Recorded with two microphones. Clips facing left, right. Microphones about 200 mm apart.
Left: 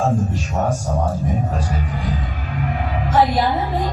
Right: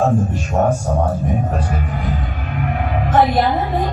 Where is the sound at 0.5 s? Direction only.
55° right (ahead or behind).